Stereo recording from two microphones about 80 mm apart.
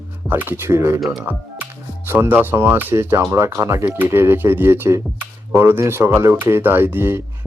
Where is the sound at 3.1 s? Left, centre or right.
Right.